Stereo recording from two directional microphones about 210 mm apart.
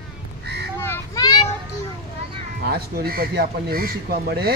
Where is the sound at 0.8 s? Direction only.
15° left (ahead or behind).